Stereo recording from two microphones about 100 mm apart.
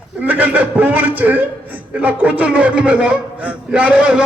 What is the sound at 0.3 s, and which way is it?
A man's voice, 15° right (ahead or behind).